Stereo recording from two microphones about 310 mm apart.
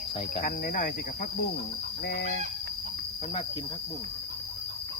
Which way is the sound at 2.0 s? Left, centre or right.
Left.